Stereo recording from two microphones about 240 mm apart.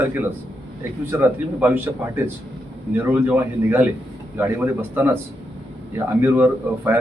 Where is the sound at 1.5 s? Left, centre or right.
Centre.